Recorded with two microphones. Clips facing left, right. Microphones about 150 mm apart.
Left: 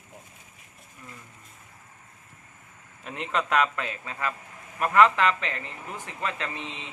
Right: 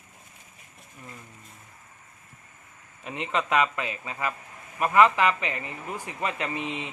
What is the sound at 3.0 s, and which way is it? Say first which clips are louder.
Speech: right 1 dB; centre (ahead or behind).